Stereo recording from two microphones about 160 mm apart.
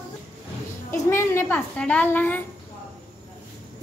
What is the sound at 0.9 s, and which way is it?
A child's voice, 15° left (ahead or behind).